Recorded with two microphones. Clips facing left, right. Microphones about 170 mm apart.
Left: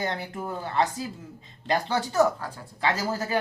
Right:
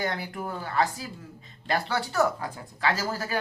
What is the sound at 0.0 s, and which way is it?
A man's voice, 20° left (ahead or behind).